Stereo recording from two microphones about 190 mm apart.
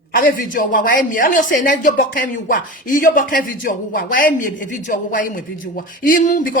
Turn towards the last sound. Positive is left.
turn(degrees=45)  # may be behind; listen again after turning